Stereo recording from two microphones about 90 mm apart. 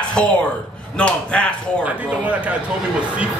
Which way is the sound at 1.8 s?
15° right (ahead or behind).